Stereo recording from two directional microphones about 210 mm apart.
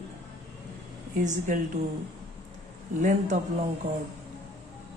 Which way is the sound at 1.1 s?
35° right (ahead or behind).